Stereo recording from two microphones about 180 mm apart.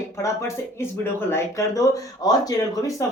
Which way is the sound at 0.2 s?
15° left (ahead or behind).